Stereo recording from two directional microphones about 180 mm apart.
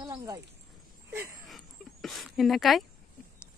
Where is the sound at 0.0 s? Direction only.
20° right (ahead or behind).